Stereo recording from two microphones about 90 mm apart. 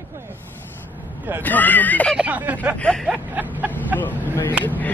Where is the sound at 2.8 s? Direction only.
10° left (ahead or behind).